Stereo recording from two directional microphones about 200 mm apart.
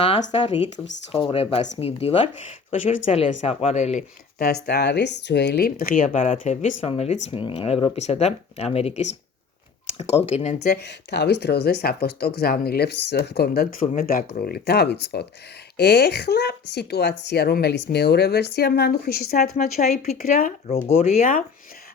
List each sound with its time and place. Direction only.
0.0 s speech: 30° left (ahead or behind)
4.4 s speech: 55° left (ahead or behind); by 10.6 s 35° left (ahead or behind)
10.7 s speech: 55° left (ahead or behind)
19.5 s speech: 35° left (ahead or behind)